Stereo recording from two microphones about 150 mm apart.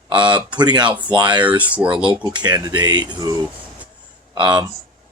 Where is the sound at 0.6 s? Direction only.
30° right (ahead or behind).